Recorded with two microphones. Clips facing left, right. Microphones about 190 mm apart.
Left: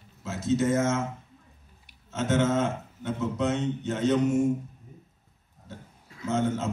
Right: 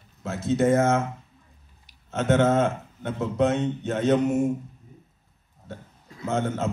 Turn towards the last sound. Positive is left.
turn(degrees=-55)  # may be behind; listen again after turning